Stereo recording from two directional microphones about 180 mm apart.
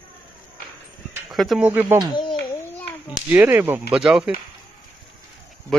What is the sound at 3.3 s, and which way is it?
Speech, 10° right (ahead or behind).